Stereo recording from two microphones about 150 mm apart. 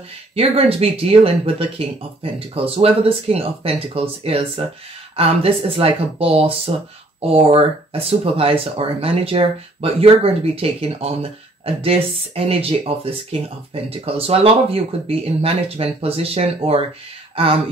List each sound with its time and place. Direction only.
0.4 s speech: 40° right (ahead or behind)